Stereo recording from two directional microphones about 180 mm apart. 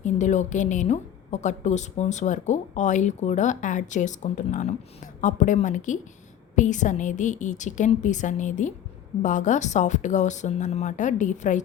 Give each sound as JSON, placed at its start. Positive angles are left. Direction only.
{"t": 0.0, "sound": "a woman's voice", "side_deg": 40}